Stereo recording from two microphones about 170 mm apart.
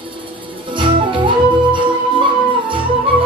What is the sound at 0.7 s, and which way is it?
Music, 30° right (ahead or behind).